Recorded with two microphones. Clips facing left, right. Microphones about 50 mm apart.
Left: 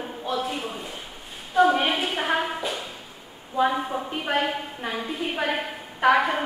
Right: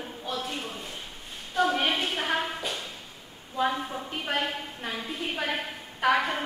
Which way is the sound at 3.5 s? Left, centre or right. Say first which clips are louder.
Left 5 dB; centre.